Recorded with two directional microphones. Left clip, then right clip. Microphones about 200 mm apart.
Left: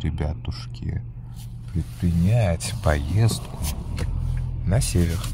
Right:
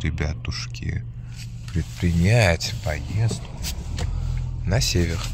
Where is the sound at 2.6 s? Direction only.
30° left (ahead or behind).